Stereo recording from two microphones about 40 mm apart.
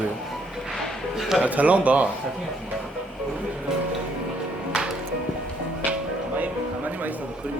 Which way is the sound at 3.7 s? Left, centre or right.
Centre.